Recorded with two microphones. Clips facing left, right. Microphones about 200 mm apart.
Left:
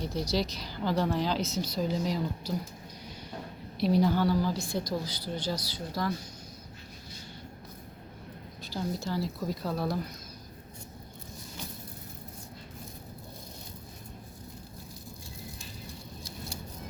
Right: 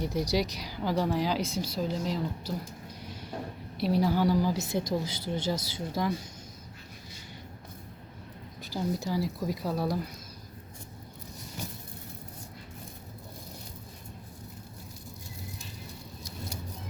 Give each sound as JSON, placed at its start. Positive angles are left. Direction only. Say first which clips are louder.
{"t": 0.0, "sound": "a woman's voice", "louder": "right 2 dB", "side_deg": -15}
{"t": 3.8, "sound": "a woman's voice", "louder": "left 1 dB", "side_deg": -5}
{"t": 8.7, "sound": "a woman's voice", "louder": "right 2 dB", "side_deg": -15}